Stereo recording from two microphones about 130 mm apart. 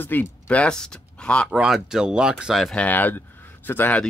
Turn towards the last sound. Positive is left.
turn(degrees=15)  # may be behind; listen again after turning